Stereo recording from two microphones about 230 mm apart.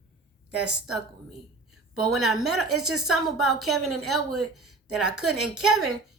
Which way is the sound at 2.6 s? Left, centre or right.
Right.